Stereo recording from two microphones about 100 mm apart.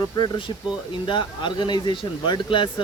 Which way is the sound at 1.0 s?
50° left (ahead or behind).